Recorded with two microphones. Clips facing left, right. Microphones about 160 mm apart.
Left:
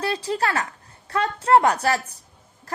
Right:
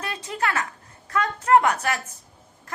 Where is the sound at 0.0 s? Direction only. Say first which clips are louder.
Left 4 dB; 35° left (ahead or behind).